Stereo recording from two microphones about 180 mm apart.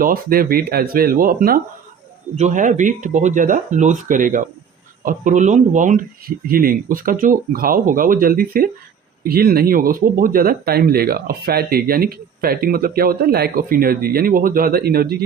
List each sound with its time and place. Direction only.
0.0 s speech: 55° right (ahead or behind)